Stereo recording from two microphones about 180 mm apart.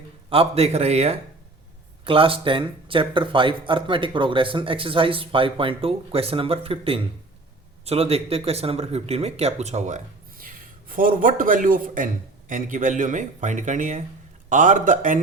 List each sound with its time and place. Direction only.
0.3 s speech: 30° right (ahead or behind)